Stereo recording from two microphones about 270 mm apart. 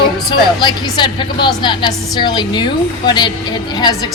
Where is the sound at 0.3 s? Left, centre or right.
Centre.